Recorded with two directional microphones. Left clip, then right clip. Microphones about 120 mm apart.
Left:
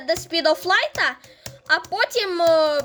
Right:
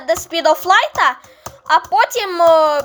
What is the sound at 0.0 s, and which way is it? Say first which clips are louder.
Speech: right 5 dB; 30° left (ahead or behind).